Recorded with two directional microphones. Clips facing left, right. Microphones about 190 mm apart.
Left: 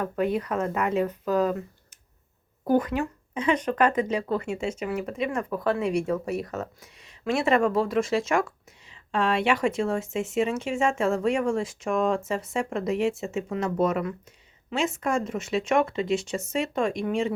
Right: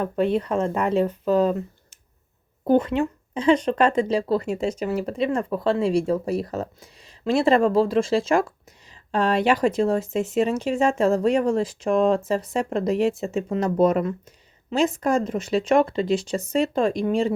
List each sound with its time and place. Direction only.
0.0 s speech: 30° right (ahead or behind)
2.6 s speech: 25° right (ahead or behind)